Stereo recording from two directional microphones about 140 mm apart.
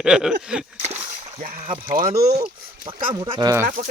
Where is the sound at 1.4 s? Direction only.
80° right.